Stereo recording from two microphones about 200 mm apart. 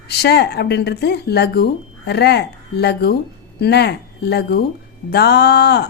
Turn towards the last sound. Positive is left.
turn(degrees=55)  # may be behind; listen again after turning